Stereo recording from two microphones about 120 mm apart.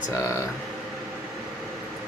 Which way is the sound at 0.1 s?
25° left (ahead or behind).